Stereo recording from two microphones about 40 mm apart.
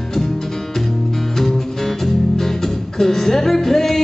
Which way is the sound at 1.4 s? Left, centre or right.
Centre.